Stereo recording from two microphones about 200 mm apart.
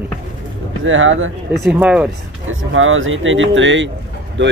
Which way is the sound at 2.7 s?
80° right.